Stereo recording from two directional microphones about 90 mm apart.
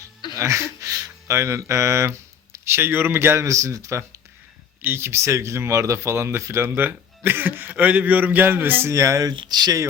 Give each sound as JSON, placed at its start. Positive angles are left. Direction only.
{"t": 0.3, "sound": "speech", "side_deg": -35}
{"t": 4.8, "sound": "speech", "side_deg": -25}
{"t": 9.3, "sound": "speech", "side_deg": -60}